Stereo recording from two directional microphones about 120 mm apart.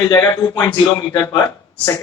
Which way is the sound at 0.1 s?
30° left (ahead or behind).